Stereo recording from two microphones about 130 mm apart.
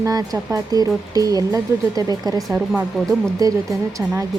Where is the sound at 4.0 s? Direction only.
10° right (ahead or behind).